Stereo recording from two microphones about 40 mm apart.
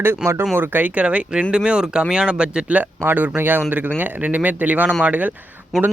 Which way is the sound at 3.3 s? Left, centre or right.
Right.